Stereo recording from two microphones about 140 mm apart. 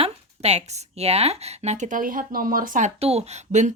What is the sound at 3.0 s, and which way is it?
Speech, 45° right (ahead or behind).